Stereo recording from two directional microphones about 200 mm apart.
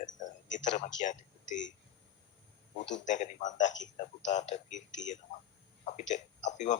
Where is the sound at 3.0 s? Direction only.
40° left (ahead or behind).